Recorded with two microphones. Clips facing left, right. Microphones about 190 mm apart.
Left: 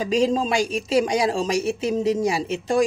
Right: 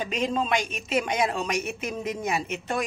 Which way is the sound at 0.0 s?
35° left (ahead or behind).